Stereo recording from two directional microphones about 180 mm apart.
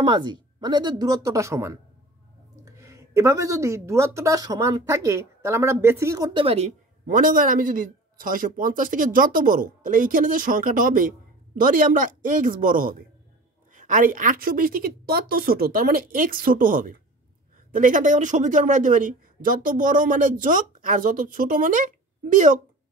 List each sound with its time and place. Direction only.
0.0 s a woman's voice: 25° right (ahead or behind)
7.1 s a man's voice: 50° right (ahead or behind)